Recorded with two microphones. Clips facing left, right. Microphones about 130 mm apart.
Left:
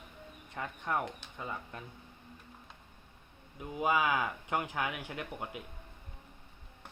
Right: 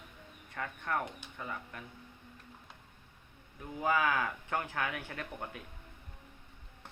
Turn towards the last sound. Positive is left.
turn(degrees=15)  # may be behind; listen again after turning